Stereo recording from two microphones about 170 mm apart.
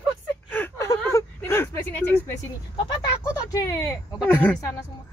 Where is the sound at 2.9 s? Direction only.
20° left (ahead or behind).